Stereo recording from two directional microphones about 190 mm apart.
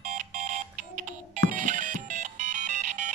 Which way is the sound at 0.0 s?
40° right (ahead or behind).